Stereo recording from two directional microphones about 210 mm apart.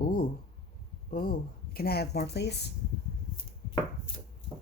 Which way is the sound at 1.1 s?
45° left (ahead or behind).